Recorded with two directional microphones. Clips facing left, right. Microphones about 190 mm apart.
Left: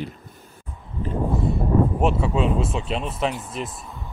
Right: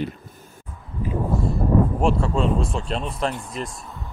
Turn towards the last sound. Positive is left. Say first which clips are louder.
# even
turn(degrees=0)  # may be behind; listen again after turning